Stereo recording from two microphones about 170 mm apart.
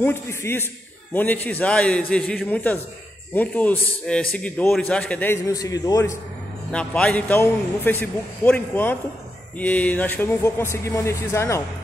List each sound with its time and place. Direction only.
0.0 s a man's voice: 15° left (ahead or behind)
5.5 s a man's voice: 20° left (ahead or behind)
6.7 s a man's voice: 5° left (ahead or behind)